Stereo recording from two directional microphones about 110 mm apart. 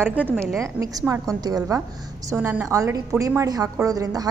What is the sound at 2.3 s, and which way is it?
A woman's voice, 20° right (ahead or behind).